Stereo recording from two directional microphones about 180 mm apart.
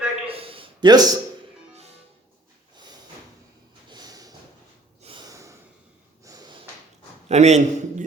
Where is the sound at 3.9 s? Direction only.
20° right (ahead or behind).